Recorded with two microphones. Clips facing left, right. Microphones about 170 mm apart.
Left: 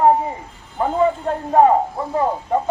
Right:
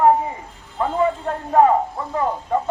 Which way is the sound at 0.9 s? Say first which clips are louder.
Left 3 dB; 35° left (ahead or behind).